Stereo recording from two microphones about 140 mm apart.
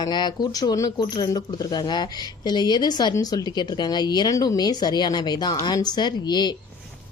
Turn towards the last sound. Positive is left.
turn(degrees=30)  # may be behind; listen again after turning